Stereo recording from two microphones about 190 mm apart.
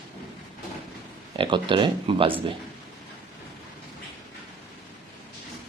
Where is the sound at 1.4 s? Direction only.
25° right (ahead or behind).